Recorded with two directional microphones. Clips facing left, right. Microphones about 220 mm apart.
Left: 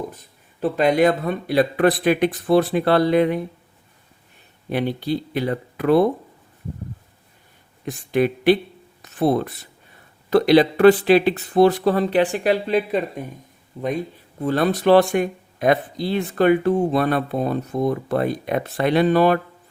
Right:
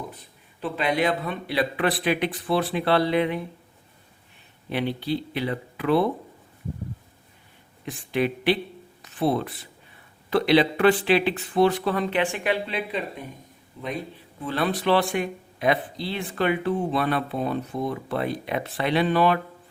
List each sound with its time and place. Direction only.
0.6 s speech: 45° left (ahead or behind)
4.7 s speech: 45° left (ahead or behind)
7.9 s speech: 45° left (ahead or behind)